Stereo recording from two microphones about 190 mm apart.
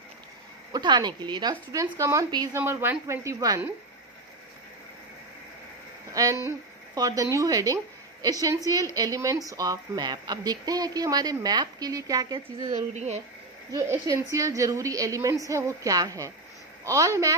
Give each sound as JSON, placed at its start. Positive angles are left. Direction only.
{"t": 0.7, "sound": "a woman's voice", "side_deg": -20}
{"t": 6.2, "sound": "a woman's voice", "side_deg": -15}
{"t": 12.7, "sound": "speech", "side_deg": -35}
{"t": 13.7, "sound": "a woman's voice", "side_deg": -15}